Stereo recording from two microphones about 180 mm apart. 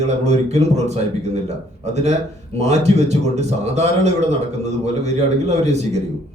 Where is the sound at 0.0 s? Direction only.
40° right (ahead or behind).